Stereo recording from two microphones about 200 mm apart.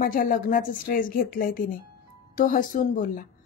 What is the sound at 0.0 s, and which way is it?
A woman's voice, 45° left (ahead or behind).